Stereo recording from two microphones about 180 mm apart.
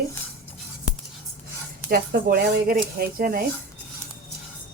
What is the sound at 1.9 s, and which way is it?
Speech, 55° right (ahead or behind).